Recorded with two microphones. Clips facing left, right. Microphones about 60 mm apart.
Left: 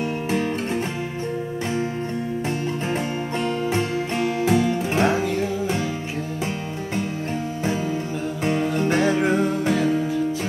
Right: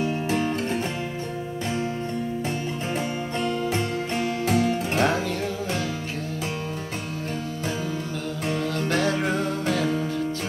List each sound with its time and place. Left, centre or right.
3.4 s music: left
8.5 s music: left